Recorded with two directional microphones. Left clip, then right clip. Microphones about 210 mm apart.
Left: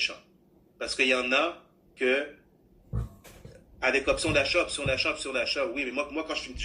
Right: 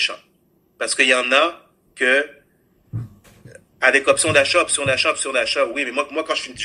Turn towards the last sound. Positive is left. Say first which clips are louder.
# right 10 dB
turn(degrees=-50)  # may be behind; listen again after turning